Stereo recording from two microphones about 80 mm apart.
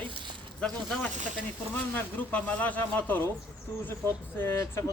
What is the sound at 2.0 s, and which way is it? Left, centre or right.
Speech, left.